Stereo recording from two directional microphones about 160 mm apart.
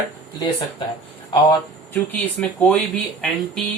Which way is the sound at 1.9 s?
10° left (ahead or behind).